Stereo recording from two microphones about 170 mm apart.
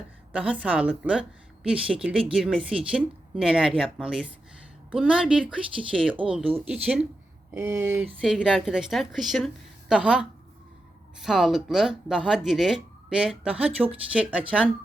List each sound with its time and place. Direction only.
0.3 s a woman's voice: 5° right (ahead or behind)
6.5 s speech: 30° right (ahead or behind)
6.8 s a woman's voice: 5° right (ahead or behind)
8.2 s speech: centre (ahead or behind)